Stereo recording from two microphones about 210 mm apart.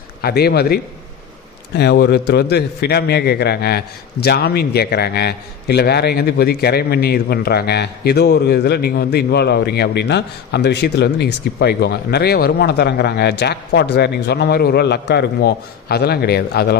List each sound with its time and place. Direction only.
0.2 s a man's voice: 50° left (ahead or behind)